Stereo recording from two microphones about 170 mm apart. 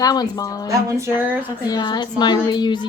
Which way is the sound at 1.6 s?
25° left (ahead or behind).